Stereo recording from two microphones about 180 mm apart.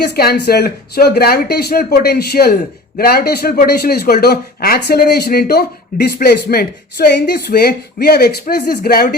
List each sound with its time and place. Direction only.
0.0 s speech: 60° left (ahead or behind)